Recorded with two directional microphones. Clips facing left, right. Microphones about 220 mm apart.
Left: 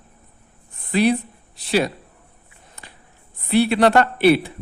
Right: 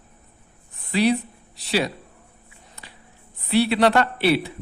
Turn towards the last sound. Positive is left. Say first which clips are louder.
# left 4 dB
turn(degrees=50)  # may be behind; listen again after turning